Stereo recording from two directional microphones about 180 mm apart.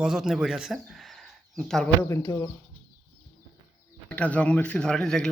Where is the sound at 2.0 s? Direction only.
15° left (ahead or behind).